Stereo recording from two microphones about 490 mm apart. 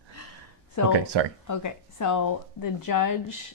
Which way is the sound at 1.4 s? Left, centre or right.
Left.